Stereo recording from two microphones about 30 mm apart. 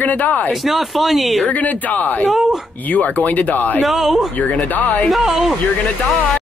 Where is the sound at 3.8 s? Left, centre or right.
Centre.